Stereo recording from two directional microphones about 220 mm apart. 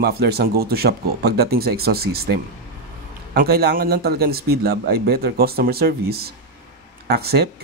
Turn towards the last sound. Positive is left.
turn(degrees=-45)  # may be behind; listen again after turning